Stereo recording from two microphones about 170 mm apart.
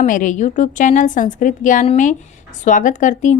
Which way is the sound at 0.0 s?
50° left (ahead or behind).